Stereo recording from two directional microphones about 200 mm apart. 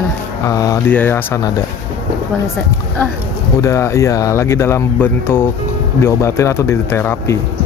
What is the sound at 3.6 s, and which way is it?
Speech, 15° left (ahead or behind).